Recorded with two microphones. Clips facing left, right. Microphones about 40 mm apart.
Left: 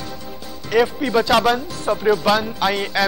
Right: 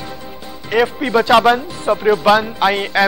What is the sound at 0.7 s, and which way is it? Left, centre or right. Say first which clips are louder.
Speech: right 2 dB; centre.